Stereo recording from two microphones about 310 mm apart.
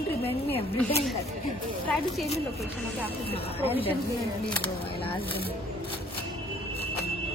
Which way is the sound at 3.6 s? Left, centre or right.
Centre.